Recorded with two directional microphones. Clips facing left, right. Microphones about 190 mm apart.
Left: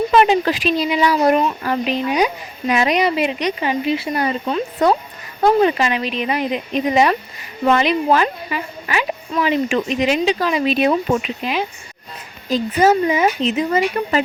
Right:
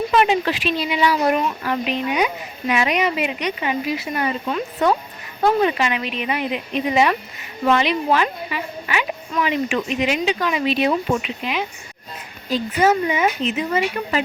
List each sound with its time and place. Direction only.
0.1 s speech: 35° left (ahead or behind)
12.8 s speech: 40° left (ahead or behind)